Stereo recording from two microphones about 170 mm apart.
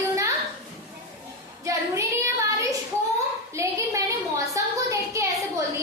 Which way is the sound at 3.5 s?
15° right (ahead or behind).